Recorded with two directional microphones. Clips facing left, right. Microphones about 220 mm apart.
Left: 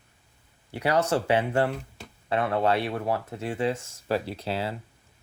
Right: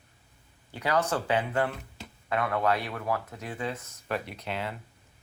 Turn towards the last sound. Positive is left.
turn(degrees=30)  # may be behind; listen again after turning